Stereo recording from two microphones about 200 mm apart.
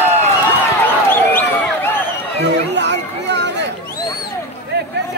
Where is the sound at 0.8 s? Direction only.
10° left (ahead or behind).